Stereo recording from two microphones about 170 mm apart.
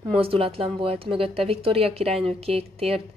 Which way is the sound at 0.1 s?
35° right (ahead or behind).